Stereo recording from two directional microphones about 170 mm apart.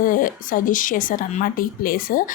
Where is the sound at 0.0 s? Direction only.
55° left (ahead or behind).